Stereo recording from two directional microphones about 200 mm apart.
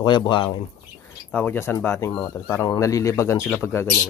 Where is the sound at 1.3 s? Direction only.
10° left (ahead or behind).